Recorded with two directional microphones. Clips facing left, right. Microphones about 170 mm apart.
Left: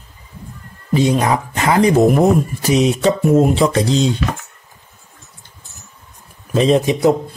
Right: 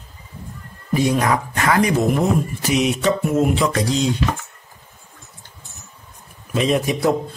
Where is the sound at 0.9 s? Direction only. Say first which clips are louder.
Left 3 dB; 25° left (ahead or behind).